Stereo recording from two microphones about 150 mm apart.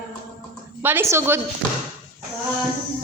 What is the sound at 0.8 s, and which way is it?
Female singing, 15° right (ahead or behind).